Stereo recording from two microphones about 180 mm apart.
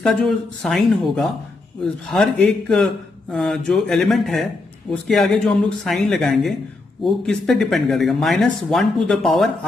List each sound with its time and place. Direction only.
0.0 s speech: 5° left (ahead or behind)